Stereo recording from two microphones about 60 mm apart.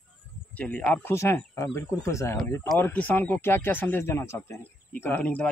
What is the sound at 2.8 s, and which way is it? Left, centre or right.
Speech, left.